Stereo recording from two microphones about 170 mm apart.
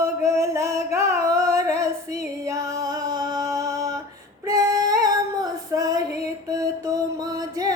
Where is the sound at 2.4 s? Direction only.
20° right (ahead or behind).